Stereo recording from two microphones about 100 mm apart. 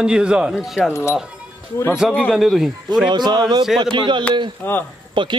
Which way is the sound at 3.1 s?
45° right (ahead or behind).